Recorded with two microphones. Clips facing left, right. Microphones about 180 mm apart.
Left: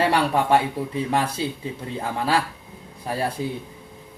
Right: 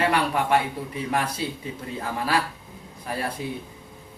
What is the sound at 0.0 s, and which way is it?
Speech, 30° left (ahead or behind).